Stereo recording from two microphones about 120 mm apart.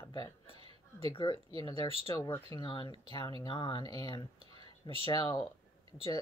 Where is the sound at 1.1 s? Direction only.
40° left (ahead or behind).